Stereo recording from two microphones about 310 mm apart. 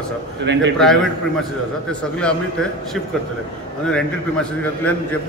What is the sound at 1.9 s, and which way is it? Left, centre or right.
Speech, centre.